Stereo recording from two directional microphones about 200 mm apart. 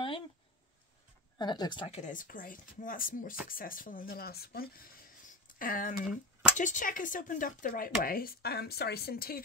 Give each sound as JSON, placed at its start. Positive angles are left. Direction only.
{"t": 1.4, "sound": "speech", "side_deg": 20}
{"t": 1.9, "sound": "speech", "side_deg": 40}